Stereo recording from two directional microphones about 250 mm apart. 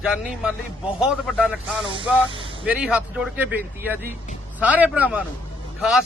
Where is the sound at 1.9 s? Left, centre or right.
Right.